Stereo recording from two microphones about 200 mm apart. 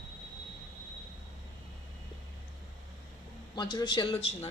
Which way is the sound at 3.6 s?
25° left (ahead or behind).